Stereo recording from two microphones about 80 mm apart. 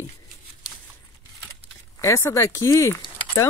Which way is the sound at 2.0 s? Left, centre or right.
Left.